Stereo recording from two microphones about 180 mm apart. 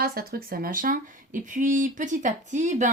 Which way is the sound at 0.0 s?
55° right (ahead or behind).